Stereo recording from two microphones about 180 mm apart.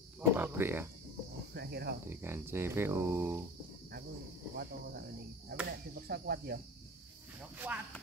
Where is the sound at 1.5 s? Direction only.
65° right (ahead or behind).